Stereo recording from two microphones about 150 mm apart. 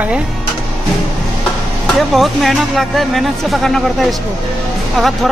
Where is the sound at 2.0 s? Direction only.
Centre (ahead or behind).